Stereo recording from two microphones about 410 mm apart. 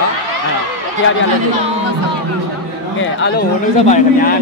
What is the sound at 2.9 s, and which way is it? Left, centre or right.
Speech, left.